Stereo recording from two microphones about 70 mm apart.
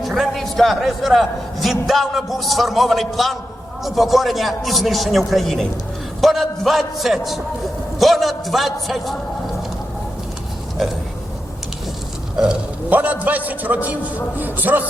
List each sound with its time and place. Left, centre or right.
0.0 s a man's voice: centre
12.4 s speech: centre
12.9 s a man's voice: right